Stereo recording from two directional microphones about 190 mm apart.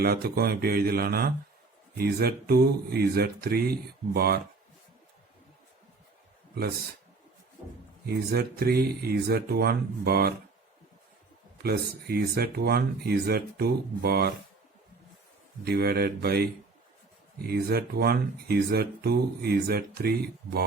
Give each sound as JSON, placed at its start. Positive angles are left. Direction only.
{"t": 0.0, "sound": "speech", "side_deg": -55}
{"t": 8.0, "sound": "speech", "side_deg": -55}
{"t": 11.5, "sound": "speech", "side_deg": -55}
{"t": 15.6, "sound": "speech", "side_deg": -55}